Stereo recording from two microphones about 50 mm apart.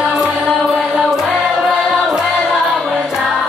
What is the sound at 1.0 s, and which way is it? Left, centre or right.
Music, centre.